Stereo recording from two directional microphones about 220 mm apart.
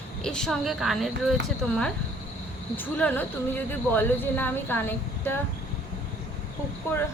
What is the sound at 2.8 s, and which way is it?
Speech, 10° left (ahead or behind).